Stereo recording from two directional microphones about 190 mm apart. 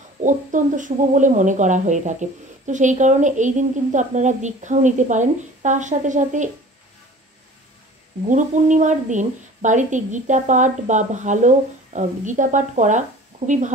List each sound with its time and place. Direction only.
0.2 s speech: 40° right (ahead or behind)
8.3 s speech: 40° right (ahead or behind)